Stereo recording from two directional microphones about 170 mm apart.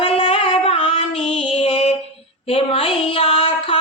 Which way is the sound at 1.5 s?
40° left (ahead or behind).